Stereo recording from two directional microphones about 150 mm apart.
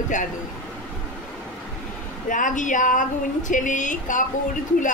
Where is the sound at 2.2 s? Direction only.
60° left (ahead or behind).